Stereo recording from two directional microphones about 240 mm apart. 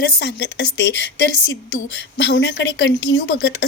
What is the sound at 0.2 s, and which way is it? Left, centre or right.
Speech, left.